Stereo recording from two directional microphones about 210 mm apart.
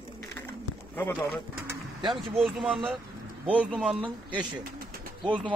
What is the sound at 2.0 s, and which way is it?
A man's voice, centre (ahead or behind).